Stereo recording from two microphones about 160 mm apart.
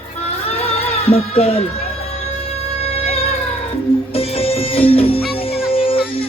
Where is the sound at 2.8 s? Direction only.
40° left (ahead or behind).